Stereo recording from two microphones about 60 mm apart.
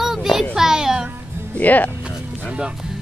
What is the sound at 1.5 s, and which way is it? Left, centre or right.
Speech, left.